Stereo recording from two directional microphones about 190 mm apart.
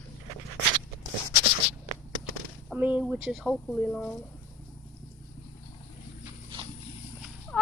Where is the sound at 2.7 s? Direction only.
10° right (ahead or behind).